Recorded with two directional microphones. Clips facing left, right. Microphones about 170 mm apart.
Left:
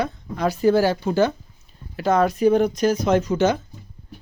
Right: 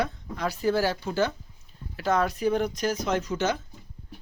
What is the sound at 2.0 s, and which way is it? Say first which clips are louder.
Speech: left 7 dB; 20° left (ahead or behind).